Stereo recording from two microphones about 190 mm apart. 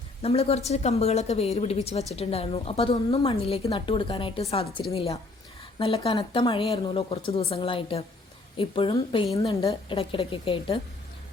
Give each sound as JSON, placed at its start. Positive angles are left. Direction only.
{"t": 0.2, "sound": "a woman's voice", "side_deg": 30}